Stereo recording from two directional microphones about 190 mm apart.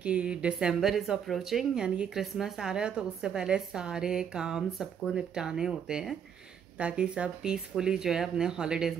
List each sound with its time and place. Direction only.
0.0 s speech: 5° right (ahead or behind)